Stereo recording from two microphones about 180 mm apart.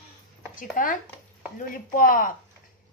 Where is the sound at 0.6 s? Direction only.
50° left (ahead or behind).